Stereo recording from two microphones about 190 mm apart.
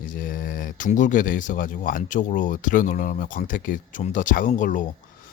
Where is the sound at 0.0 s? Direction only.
45° left (ahead or behind).